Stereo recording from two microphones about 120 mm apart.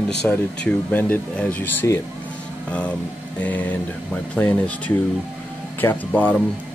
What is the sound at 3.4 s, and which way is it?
Speech, 15° left (ahead or behind).